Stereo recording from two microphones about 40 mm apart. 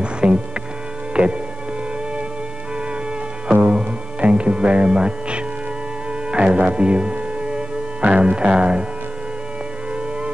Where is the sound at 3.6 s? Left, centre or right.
Right.